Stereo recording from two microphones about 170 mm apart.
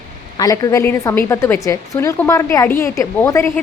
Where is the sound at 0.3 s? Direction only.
20° left (ahead or behind).